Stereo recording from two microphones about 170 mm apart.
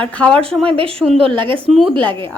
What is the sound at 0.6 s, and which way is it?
Speech, 30° right (ahead or behind).